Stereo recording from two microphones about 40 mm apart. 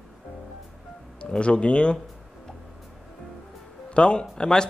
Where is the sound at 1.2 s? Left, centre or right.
Left.